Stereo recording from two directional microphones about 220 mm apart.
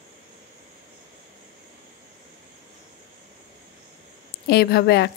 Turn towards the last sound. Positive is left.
turn(degrees=45)  # may be behind; listen again after turning